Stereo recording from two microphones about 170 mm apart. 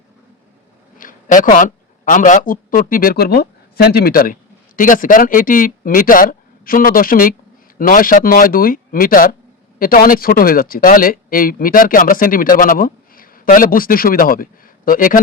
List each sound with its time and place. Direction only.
0.9 s a man's voice: 55° left (ahead or behind)